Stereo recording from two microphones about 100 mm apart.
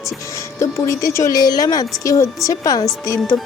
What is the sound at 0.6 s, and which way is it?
Speech, 30° left (ahead or behind).